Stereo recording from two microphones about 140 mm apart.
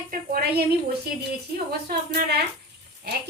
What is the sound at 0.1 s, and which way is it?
Speech, 90° right.